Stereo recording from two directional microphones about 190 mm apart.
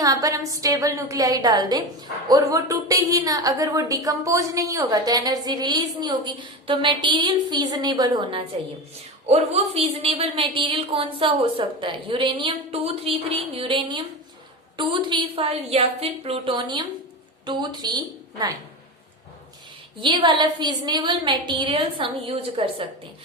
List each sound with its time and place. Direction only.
0.0 s a woman's voice: 20° right (ahead or behind)
20.0 s a woman's voice: 25° right (ahead or behind)